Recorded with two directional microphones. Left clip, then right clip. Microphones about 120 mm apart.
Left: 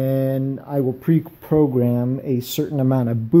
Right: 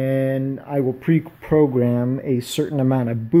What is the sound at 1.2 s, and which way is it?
Speech, centre (ahead or behind).